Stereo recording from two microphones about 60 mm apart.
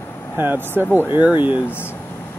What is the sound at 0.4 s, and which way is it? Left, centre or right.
Speech, right.